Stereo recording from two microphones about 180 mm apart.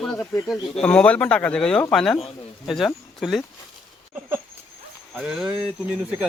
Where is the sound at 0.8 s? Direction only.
5° left (ahead or behind).